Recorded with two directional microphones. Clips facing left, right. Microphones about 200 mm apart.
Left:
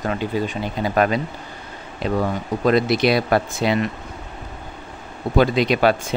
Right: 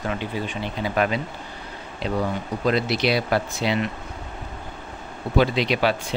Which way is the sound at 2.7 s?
50° left (ahead or behind).